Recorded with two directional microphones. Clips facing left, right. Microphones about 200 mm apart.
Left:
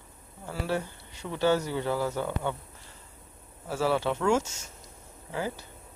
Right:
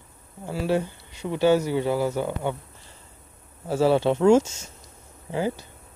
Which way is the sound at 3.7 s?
25° right (ahead or behind).